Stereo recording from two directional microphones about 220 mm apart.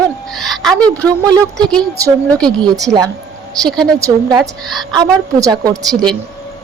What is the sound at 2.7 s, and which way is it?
Speech, 15° right (ahead or behind).